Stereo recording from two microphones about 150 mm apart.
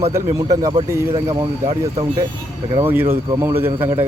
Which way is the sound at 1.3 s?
40° right (ahead or behind).